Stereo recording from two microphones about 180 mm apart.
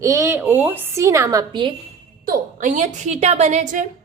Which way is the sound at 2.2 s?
45° right (ahead or behind).